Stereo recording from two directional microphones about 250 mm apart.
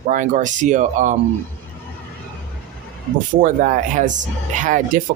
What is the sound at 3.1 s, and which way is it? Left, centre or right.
Speech, right.